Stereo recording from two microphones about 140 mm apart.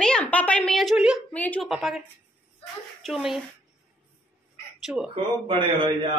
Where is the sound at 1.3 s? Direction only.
10° left (ahead or behind).